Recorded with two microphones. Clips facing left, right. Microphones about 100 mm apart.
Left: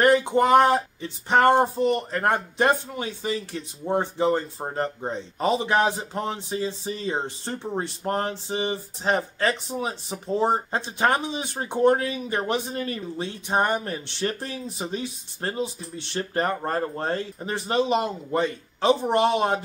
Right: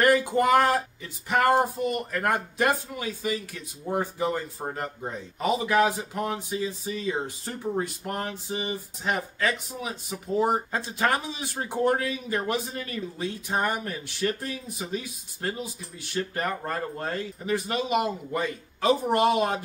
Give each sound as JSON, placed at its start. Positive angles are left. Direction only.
{"t": 0.0, "sound": "speech", "side_deg": 25}